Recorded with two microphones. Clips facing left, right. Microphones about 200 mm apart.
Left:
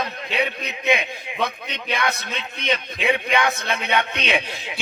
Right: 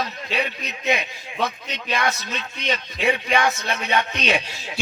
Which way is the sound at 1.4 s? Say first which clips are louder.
Even; 55° left (ahead or behind).